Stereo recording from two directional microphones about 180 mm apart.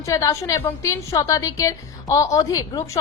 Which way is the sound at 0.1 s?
20° left (ahead or behind).